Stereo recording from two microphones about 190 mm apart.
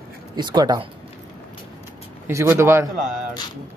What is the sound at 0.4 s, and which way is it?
Speech, 20° right (ahead or behind).